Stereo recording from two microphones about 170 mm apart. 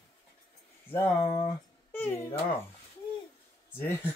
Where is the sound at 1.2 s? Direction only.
25° left (ahead or behind).